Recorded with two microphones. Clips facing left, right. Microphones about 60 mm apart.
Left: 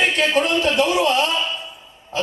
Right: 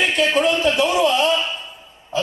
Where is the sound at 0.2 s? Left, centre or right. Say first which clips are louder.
Right 1 dB; left.